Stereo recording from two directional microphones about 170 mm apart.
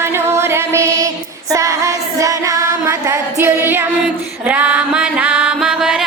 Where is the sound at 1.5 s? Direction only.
20° right (ahead or behind).